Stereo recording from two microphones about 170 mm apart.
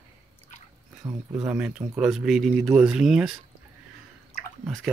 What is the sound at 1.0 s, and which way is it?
Speech, 25° right (ahead or behind).